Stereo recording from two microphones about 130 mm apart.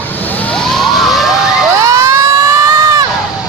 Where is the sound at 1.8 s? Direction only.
25° right (ahead or behind).